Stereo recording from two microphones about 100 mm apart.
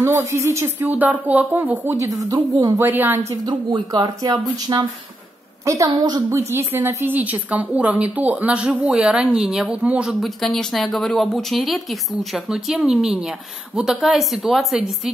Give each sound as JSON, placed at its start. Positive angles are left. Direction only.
{"t": 0.0, "sound": "a woman's voice", "side_deg": -25}
{"t": 2.0, "sound": "speech", "side_deg": -35}
{"t": 2.8, "sound": "a woman's voice", "side_deg": -20}
{"t": 3.4, "sound": "speech", "side_deg": -45}
{"t": 5.7, "sound": "a woman's voice", "side_deg": -30}
{"t": 10.2, "sound": "speech", "side_deg": 5}